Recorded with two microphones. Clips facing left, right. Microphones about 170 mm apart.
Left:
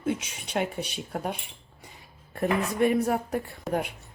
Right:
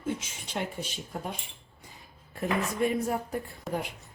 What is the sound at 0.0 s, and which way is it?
Speech, 70° left (ahead or behind).